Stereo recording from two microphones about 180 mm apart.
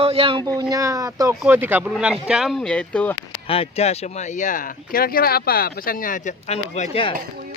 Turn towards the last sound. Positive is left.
turn(degrees=30)  # may be behind; listen again after turning